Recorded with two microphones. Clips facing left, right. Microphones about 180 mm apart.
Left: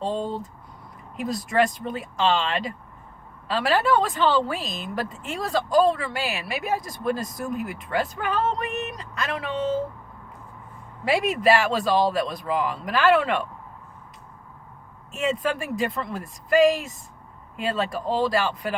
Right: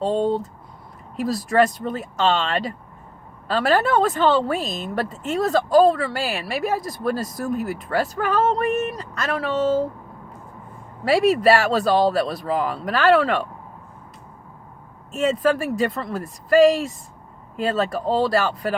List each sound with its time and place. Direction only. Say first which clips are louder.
0.0 s speech: right 7 dB; 40° right (ahead or behind)
1.5 s speech: right 4 dB; 40° right (ahead or behind)
11.0 s speech: right 5 dB; 40° right (ahead or behind)
15.1 s speech: right 6 dB; 40° right (ahead or behind)